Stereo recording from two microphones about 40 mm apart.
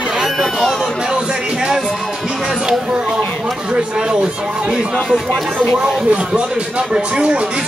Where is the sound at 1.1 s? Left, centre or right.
Right.